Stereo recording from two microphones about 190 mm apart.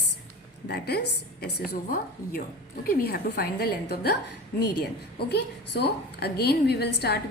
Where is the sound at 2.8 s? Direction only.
55° left (ahead or behind).